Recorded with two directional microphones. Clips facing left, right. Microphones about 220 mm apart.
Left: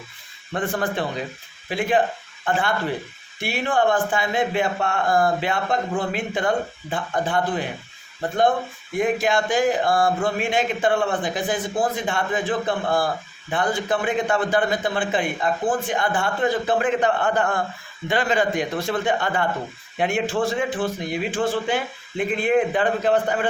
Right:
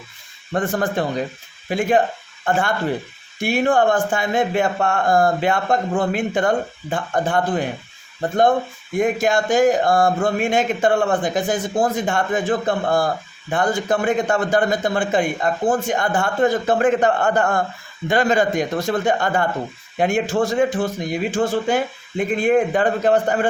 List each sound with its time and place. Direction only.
0.5 s speech: 45° right (ahead or behind)
9.0 s speech: 45° right (ahead or behind)